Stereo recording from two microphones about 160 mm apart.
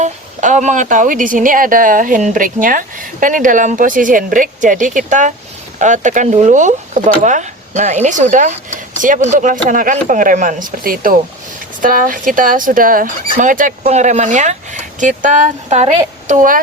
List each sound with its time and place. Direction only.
0.0 s speech: 50° right (ahead or behind)